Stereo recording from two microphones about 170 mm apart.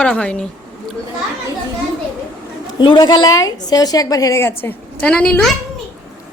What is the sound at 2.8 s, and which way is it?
A woman's voice, 25° left (ahead or behind).